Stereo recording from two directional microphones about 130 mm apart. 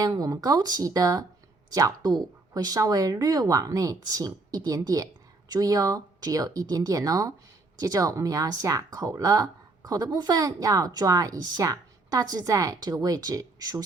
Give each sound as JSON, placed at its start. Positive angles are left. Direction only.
{"t": 0.0, "sound": "speech", "side_deg": -30}